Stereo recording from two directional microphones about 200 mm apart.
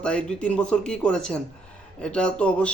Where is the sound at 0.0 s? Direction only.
5° left (ahead or behind).